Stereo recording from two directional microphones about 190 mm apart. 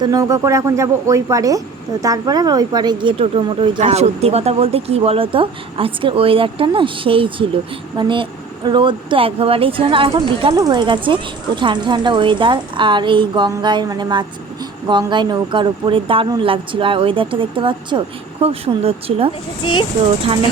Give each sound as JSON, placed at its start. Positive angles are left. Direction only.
{"t": 0.0, "sound": "speech", "side_deg": -20}